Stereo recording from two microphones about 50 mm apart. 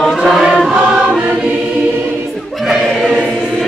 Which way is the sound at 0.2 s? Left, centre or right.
Centre.